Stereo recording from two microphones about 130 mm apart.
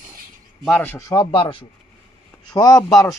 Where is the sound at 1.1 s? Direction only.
35° left (ahead or behind).